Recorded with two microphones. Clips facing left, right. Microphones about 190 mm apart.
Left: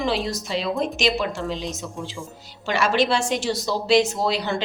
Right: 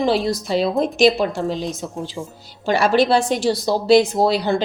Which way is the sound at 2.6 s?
35° right (ahead or behind).